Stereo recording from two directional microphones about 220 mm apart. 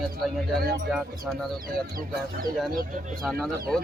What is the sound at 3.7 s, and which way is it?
Speech, centre (ahead or behind).